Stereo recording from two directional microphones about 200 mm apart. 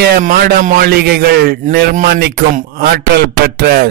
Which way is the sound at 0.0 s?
50° right (ahead or behind).